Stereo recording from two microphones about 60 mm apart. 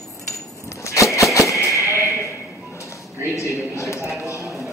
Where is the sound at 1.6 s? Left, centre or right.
Right.